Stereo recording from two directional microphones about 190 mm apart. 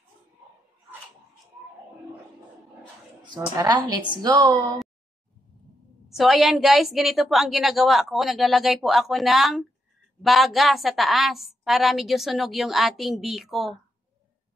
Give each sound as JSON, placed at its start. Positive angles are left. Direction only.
{"t": 3.3, "sound": "a woman's voice", "side_deg": -20}
{"t": 6.0, "sound": "a woman's voice", "side_deg": 0}